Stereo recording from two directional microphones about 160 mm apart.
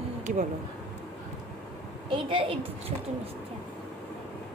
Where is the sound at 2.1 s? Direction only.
30° right (ahead or behind).